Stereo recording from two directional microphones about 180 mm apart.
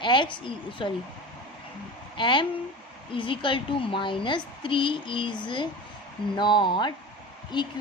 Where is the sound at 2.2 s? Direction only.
25° left (ahead or behind).